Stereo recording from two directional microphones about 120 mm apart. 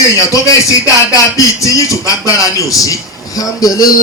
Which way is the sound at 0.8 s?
25° left (ahead or behind).